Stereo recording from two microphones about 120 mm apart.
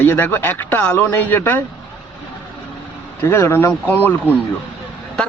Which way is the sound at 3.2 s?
20° left (ahead or behind).